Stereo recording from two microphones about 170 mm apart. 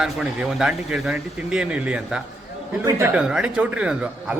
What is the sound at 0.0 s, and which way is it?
A man's voice, 5° right (ahead or behind).